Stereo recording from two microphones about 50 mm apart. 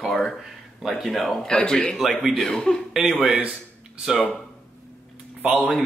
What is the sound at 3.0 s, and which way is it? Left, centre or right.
Speech, centre.